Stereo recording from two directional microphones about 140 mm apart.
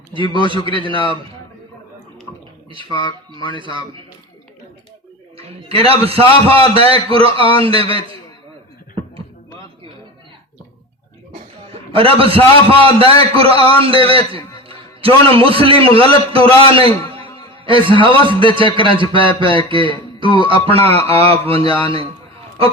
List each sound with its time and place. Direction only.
0.5 s a man's voice: 40° right (ahead or behind)
3.6 s a man's voice: 35° right (ahead or behind)
5.5 s a man's voice: 45° right (ahead or behind)
11.7 s a man's voice: 40° right (ahead or behind)